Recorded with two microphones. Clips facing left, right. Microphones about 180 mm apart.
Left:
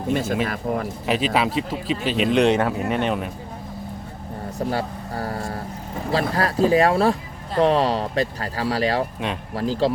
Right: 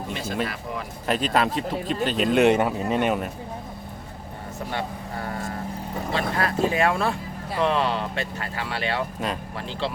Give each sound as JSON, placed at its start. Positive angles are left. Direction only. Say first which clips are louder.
{"t": 0.1, "sound": "speech", "louder": "left 7 dB", "side_deg": 50}
{"t": 1.0, "sound": "speech", "louder": "even", "side_deg": 5}
{"t": 4.7, "sound": "speech", "louder": "left 4 dB", "side_deg": 35}